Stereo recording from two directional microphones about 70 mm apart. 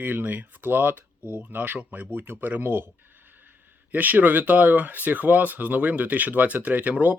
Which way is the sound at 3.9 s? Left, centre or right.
Right.